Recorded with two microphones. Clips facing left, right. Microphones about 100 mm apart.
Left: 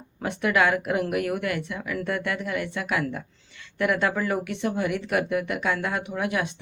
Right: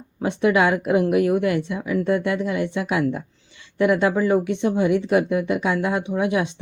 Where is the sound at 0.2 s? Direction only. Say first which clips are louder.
Right 5 dB; 25° right (ahead or behind).